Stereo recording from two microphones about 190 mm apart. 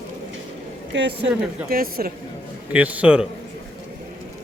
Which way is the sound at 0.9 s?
65° right (ahead or behind).